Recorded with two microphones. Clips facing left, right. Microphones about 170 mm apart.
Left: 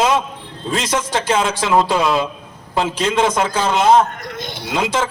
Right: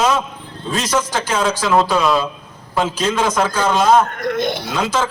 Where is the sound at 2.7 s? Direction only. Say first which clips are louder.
Even; 25° left (ahead or behind).